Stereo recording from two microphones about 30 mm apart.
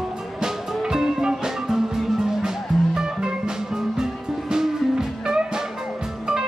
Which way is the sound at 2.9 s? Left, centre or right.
Right.